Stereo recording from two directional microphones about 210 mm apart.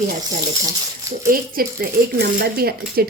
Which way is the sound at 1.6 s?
45° right (ahead or behind).